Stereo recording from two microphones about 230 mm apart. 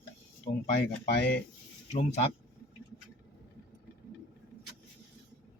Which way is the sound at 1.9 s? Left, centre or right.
Left.